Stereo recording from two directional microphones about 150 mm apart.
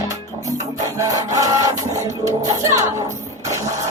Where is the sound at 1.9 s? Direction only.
20° right (ahead or behind).